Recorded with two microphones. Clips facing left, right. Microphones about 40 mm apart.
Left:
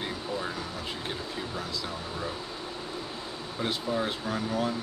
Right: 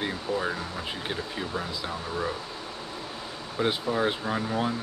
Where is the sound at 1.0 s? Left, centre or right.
Right.